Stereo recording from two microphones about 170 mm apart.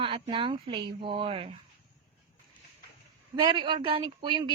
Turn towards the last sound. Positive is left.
turn(degrees=-30)  # may be behind; listen again after turning